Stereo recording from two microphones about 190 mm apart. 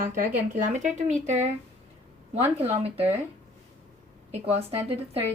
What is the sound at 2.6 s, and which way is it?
Speech, 30° right (ahead or behind).